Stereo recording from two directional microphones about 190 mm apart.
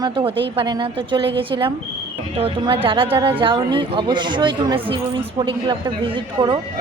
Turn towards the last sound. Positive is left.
turn(degrees=-25)  # may be behind; listen again after turning